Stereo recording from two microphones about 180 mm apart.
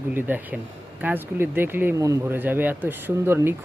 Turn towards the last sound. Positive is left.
turn(degrees=-10)  # may be behind; listen again after turning